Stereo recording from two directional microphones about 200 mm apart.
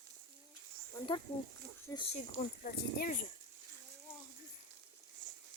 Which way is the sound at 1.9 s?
35° left (ahead or behind).